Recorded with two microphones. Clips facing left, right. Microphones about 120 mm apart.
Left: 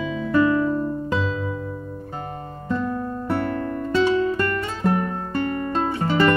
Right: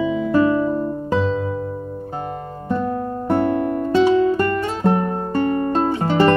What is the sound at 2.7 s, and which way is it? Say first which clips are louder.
Music: right 3 dB; 40° right (ahead or behind).